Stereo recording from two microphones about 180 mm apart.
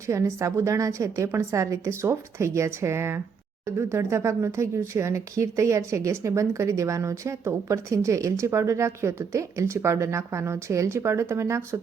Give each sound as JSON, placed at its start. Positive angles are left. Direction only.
{"t": 0.1, "sound": "speech", "side_deg": -15}